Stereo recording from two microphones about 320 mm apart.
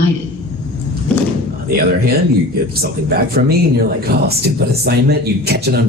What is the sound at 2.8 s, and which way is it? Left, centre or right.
Speech, right.